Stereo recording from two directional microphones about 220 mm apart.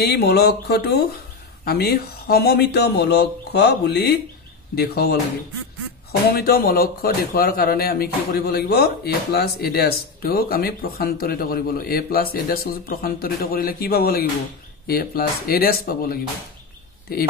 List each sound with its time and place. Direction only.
0.0 s speech: 45° left (ahead or behind)
6.3 s speech: 45° left (ahead or behind)